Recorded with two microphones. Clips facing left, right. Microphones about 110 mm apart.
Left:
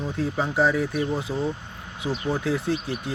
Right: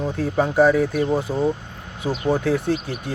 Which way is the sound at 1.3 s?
35° right (ahead or behind).